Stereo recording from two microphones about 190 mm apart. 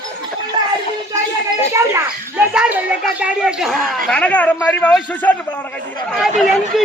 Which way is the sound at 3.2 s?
5° right (ahead or behind).